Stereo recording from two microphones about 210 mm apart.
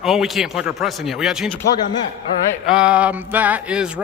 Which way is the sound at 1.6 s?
20° left (ahead or behind).